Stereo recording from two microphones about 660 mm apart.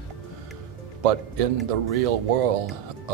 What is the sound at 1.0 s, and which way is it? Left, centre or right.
A man's voice, right.